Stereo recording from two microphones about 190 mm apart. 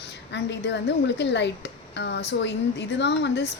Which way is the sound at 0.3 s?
65° left (ahead or behind).